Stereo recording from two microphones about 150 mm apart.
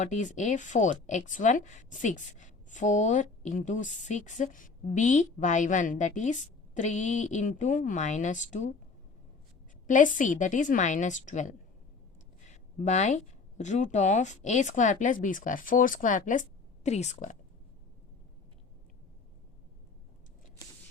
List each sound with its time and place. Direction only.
0.0 s speech: 55° left (ahead or behind)
9.8 s speech: 60° left (ahead or behind)